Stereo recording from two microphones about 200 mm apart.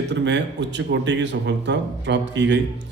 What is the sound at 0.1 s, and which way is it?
A man's voice, 60° right (ahead or behind).